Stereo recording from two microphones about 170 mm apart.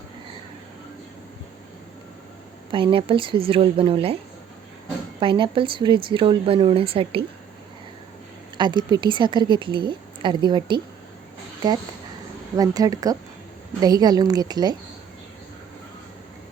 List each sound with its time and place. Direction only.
2.7 s speech: 30° right (ahead or behind)
5.2 s speech: 30° right (ahead or behind)
8.5 s a woman's voice: 25° right (ahead or behind)
12.5 s a woman's voice: 20° right (ahead or behind)